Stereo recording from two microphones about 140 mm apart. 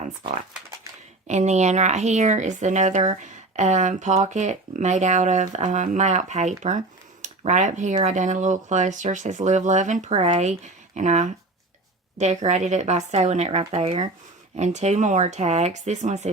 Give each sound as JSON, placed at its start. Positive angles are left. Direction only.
{"t": 1.3, "sound": "speech", "side_deg": -55}
{"t": 14.5, "sound": "speech", "side_deg": -55}